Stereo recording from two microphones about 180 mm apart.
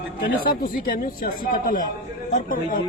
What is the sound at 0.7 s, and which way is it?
Speech, 50° left (ahead or behind).